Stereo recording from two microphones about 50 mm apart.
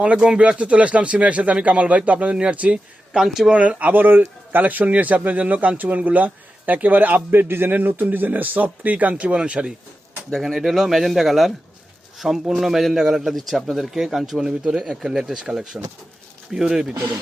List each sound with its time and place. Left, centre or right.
0.0 s speech: right
3.2 s speech: centre
3.5 s speech: right
7.3 s a man's voice: right
7.8 s speech: right; by 9.7 s centre
10.3 s a man's voice: centre